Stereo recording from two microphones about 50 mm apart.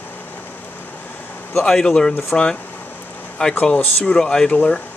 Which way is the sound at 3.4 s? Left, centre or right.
Centre.